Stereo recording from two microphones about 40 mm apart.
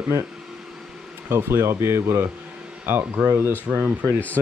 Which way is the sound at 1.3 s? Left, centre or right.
Right.